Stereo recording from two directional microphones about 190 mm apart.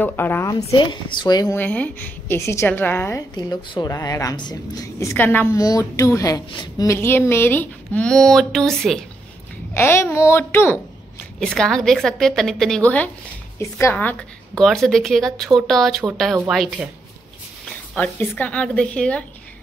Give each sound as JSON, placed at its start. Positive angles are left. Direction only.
{"t": 0.0, "sound": "a woman's voice", "side_deg": 10}
{"t": 1.6, "sound": "a woman's voice", "side_deg": 10}
{"t": 9.8, "sound": "a woman's voice", "side_deg": 15}
{"t": 17.9, "sound": "a woman's voice", "side_deg": 10}